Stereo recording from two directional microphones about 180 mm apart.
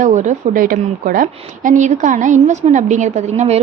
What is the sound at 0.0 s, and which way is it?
A woman's voice, 40° right (ahead or behind).